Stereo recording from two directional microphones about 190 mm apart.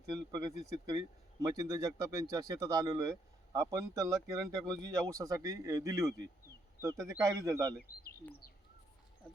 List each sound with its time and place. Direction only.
0.3 s speech: 20° right (ahead or behind)
8.2 s bird: 55° left (ahead or behind)